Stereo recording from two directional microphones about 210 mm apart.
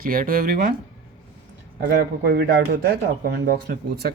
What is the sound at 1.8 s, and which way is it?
Speech, 45° right (ahead or behind).